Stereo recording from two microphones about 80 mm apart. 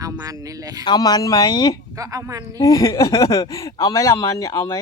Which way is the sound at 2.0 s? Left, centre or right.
Right.